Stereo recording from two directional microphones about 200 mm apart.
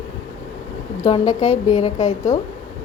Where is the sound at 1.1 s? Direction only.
35° left (ahead or behind).